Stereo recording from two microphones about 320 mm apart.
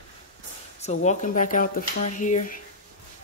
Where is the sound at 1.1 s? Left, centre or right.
Left.